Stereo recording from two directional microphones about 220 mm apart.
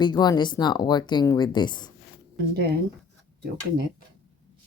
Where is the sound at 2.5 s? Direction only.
45° right (ahead or behind).